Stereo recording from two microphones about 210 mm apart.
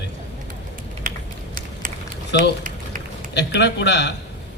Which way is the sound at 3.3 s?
55° left (ahead or behind).